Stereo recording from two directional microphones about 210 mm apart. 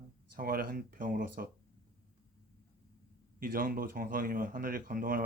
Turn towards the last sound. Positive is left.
turn(degrees=-40)  # may be behind; listen again after turning